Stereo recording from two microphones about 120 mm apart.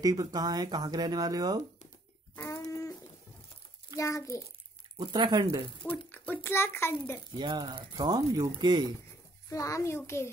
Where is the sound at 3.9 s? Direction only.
25° left (ahead or behind).